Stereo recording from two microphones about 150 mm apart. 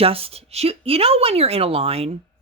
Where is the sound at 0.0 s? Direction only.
40° right (ahead or behind).